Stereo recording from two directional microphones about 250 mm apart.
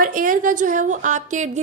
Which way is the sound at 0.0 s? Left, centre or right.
Right.